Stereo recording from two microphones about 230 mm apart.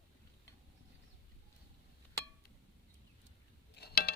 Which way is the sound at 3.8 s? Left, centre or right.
Left.